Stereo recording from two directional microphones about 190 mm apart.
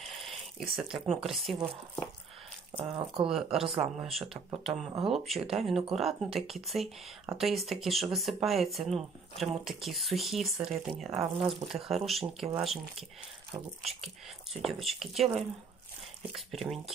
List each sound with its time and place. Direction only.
0.0 s a sound: centre (ahead or behind)
0.7 s speech: centre (ahead or behind)
2.8 s speech: 30° right (ahead or behind)
4.0 s speech: centre (ahead or behind)
16.3 s speech: centre (ahead or behind)